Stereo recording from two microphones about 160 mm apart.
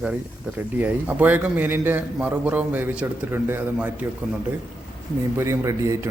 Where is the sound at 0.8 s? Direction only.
10° right (ahead or behind).